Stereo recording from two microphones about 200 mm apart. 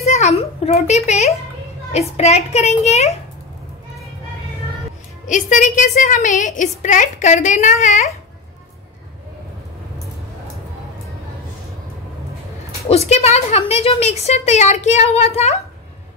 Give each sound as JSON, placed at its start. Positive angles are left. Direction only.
{"t": 0.0, "sound": "a sound", "side_deg": 35}
{"t": 1.9, "sound": "a woman's voice", "side_deg": 35}
{"t": 5.2, "sound": "a woman's voice", "side_deg": 40}
{"t": 12.8, "sound": "a woman's voice", "side_deg": 30}